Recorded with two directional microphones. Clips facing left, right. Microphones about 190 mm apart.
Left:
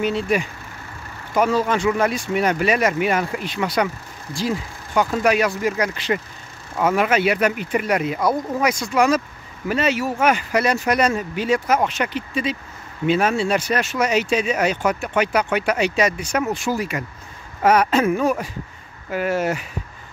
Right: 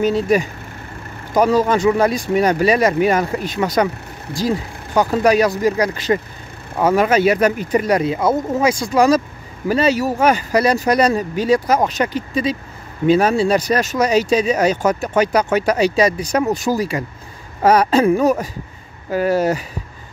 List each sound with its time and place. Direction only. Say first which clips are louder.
0.0 s speech: right 5 dB; 40° right (ahead or behind)